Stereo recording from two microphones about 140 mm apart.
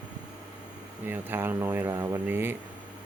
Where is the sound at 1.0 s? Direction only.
15° right (ahead or behind).